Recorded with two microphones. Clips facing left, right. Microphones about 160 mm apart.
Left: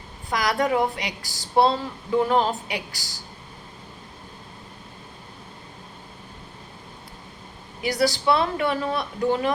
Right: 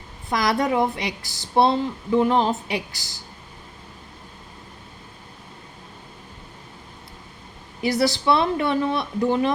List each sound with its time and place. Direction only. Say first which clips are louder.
0.3 s speech: right 1 dB; 25° right (ahead or behind)
7.8 s speech: right 2 dB; 25° right (ahead or behind)